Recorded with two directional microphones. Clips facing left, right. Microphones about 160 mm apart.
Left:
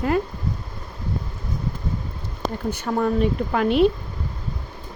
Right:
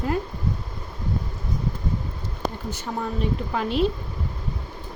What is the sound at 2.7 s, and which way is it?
Speech, 60° left (ahead or behind).